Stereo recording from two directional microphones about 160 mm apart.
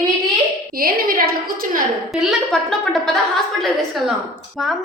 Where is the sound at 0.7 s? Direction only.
65° right (ahead or behind).